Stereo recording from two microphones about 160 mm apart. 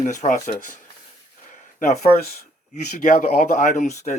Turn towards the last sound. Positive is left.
turn(degrees=45)  # may be behind; listen again after turning